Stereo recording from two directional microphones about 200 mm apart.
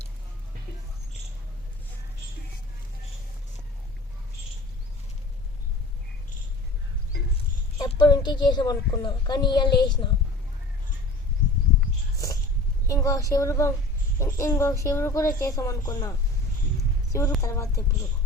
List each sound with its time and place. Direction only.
7.8 s a woman's voice: 20° left (ahead or behind)
12.9 s speech: 15° left (ahead or behind)